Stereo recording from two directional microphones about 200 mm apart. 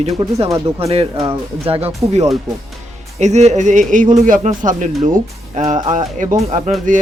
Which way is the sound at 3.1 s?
35° right (ahead or behind).